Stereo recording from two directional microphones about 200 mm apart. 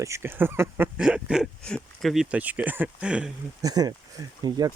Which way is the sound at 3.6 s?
20° right (ahead or behind).